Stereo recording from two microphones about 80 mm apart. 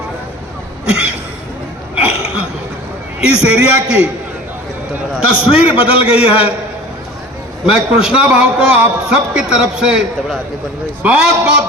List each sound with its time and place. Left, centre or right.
2.0 s hiccup: centre
3.2 s a man's voice: centre
5.5 s a man's voice: centre
7.6 s a man's voice: centre